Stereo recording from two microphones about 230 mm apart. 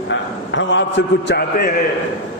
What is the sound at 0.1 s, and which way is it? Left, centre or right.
A man's voice, left.